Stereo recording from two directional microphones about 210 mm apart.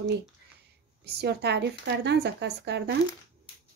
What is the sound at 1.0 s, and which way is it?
Speech, 50° right (ahead or behind).